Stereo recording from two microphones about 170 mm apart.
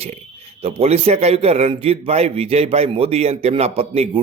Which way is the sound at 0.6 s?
35° right (ahead or behind).